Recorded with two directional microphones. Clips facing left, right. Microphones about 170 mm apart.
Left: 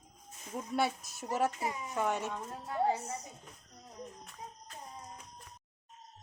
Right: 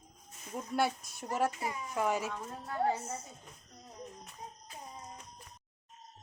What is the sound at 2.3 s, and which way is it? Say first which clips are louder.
Speech: left 1 dB; 15° left (ahead or behind).